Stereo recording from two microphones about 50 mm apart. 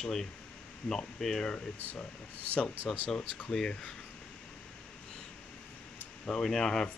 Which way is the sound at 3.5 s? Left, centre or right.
Centre.